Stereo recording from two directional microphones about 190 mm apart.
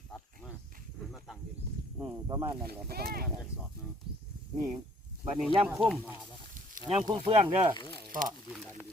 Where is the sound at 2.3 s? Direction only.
25° right (ahead or behind).